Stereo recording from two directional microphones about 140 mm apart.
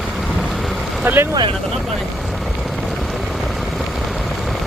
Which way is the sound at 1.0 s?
15° right (ahead or behind).